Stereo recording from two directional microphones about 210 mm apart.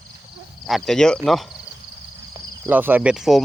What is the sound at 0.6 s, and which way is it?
Speech, centre (ahead or behind).